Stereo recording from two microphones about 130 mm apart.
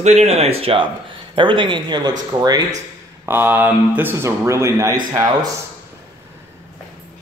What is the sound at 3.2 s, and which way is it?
Speech, 15° right (ahead or behind).